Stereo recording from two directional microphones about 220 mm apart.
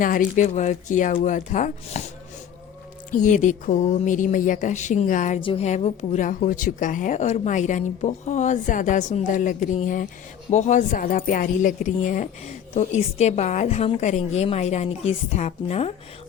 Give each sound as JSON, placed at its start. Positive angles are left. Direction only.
{"t": 0.0, "sound": "speech", "side_deg": 35}
{"t": 3.2, "sound": "speech", "side_deg": 35}